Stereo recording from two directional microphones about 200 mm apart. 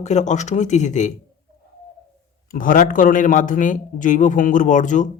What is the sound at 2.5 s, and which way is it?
A man's voice, 45° left (ahead or behind).